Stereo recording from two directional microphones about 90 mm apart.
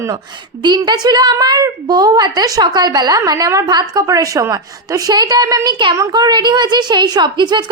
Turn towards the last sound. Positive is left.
turn(degrees=-55)  # may be behind; listen again after turning